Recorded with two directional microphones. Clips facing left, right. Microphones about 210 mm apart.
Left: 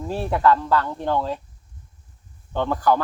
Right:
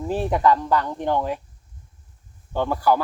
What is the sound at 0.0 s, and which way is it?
A man's voice, 15° right (ahead or behind).